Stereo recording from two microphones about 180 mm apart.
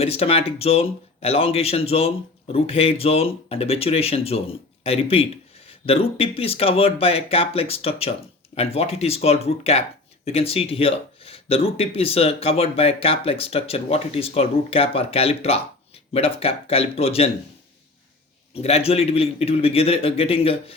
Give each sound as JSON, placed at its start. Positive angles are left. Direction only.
{"t": 0.0, "sound": "speech", "side_deg": 35}
{"t": 18.5, "sound": "speech", "side_deg": 35}